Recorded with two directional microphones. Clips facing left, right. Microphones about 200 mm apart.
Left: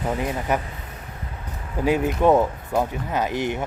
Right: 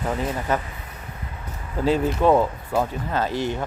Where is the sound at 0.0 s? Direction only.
15° left (ahead or behind).